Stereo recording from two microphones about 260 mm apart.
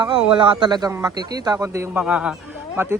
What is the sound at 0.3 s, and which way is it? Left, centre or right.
Speech, centre.